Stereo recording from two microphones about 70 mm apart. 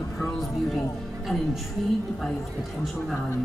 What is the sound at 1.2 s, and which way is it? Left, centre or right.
Music, centre.